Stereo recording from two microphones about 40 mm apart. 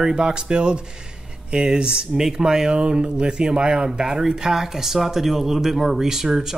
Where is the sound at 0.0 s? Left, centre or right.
Right.